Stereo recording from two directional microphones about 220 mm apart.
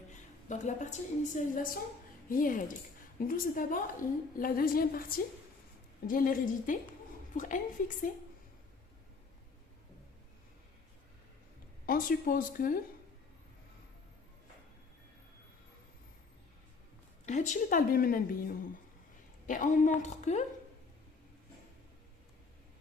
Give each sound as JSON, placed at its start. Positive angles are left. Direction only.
{"t": 0.4, "sound": "a woman's voice", "side_deg": 35}
{"t": 11.9, "sound": "a woman's voice", "side_deg": 40}
{"t": 17.2, "sound": "a woman's voice", "side_deg": 35}